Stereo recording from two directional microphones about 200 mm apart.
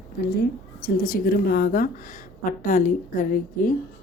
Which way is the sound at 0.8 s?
45° left (ahead or behind).